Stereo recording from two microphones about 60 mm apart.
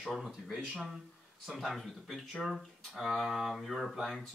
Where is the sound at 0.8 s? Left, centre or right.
Centre.